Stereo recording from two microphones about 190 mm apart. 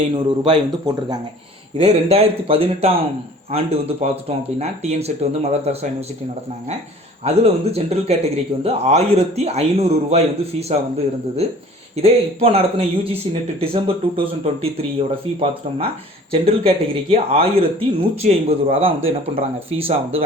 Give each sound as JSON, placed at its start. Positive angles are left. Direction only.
{"t": 0.1, "sound": "speech", "side_deg": -25}
{"t": 1.8, "sound": "a man's voice", "side_deg": -35}
{"t": 7.3, "sound": "a man's voice", "side_deg": -35}